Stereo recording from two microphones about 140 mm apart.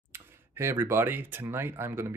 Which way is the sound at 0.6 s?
15° right (ahead or behind).